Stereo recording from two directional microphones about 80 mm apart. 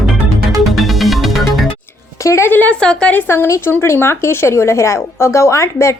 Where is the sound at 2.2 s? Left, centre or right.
Left.